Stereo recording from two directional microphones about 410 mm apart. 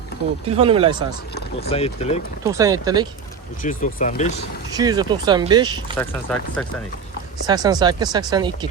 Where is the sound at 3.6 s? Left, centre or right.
Centre.